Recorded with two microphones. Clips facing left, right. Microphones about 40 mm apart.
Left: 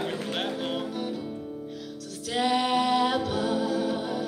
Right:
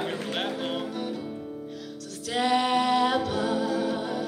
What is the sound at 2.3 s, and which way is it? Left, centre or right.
Music, centre.